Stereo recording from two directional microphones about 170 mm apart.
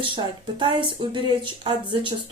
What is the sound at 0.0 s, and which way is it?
Speech, 30° right (ahead or behind).